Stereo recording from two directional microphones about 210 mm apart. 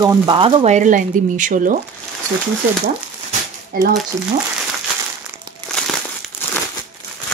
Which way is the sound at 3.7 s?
40° right (ahead or behind).